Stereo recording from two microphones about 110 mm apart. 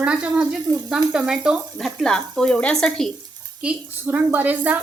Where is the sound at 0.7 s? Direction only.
35° right (ahead or behind).